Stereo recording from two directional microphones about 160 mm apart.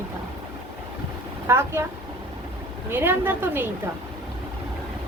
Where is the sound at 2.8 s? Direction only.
15° right (ahead or behind).